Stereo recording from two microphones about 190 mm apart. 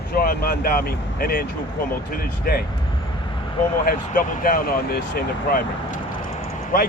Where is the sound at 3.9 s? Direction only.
50° left (ahead or behind).